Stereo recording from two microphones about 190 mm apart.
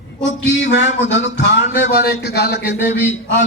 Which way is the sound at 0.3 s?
70° left (ahead or behind).